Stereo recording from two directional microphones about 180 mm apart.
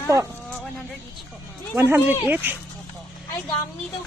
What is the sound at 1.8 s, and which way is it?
Speech, 10° right (ahead or behind).